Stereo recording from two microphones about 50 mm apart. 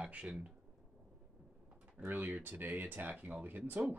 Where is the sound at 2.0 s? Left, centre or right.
Right.